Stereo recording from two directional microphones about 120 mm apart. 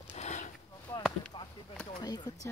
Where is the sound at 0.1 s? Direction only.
75° left (ahead or behind).